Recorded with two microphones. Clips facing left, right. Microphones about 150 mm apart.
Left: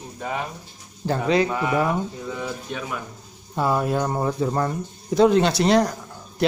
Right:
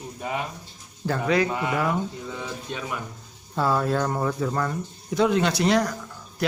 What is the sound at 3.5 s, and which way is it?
Speech, 15° left (ahead or behind).